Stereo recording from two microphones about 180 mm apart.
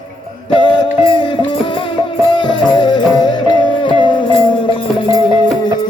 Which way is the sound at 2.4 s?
25° left (ahead or behind).